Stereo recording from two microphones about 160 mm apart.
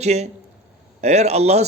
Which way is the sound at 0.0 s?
45° right (ahead or behind).